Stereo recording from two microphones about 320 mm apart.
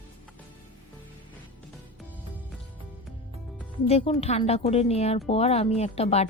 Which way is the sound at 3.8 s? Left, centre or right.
Centre.